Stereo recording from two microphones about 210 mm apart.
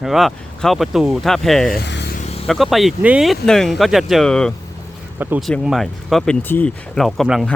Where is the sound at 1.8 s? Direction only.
55° left (ahead or behind).